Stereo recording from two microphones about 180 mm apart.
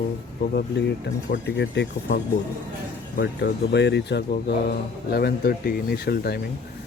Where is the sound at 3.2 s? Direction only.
70° left (ahead or behind).